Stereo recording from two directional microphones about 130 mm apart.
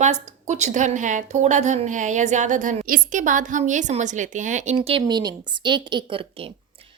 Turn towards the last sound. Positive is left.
turn(degrees=-45)  # may be behind; listen again after turning